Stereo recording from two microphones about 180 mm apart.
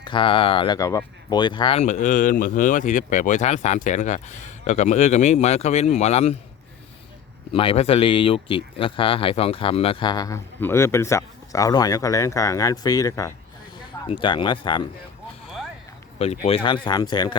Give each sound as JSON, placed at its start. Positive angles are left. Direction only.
{"t": 0.0, "sound": "speech", "side_deg": 25}
{"t": 0.8, "sound": "speech", "side_deg": 20}
{"t": 1.8, "sound": "speech", "side_deg": 40}
{"t": 7.5, "sound": "speech", "side_deg": 30}
{"t": 16.1, "sound": "speech", "side_deg": 35}